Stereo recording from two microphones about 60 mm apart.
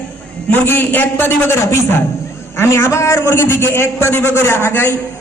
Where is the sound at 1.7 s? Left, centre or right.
Left.